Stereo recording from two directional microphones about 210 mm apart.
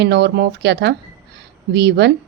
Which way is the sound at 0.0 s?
55° right (ahead or behind).